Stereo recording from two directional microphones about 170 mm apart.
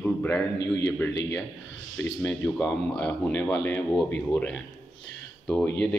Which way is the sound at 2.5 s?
5° left (ahead or behind).